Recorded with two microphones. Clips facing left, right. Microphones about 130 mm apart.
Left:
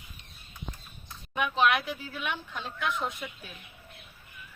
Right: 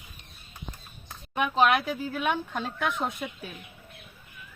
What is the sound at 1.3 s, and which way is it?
Speech, 45° right (ahead or behind).